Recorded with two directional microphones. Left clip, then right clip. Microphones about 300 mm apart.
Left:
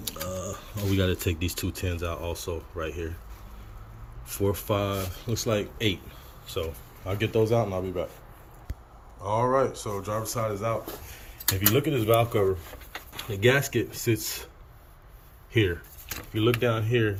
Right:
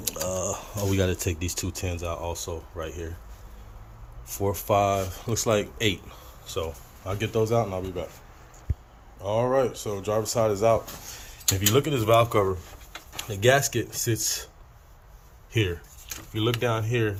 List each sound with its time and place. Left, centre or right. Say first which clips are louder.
0.0 s speech: right 5 dB; centre
4.4 s speech: right 4 dB; centre
9.2 s speech: right 1 dB; centre
13.1 s speech: right 2 dB; centre
16.3 s speech: left 1 dB; centre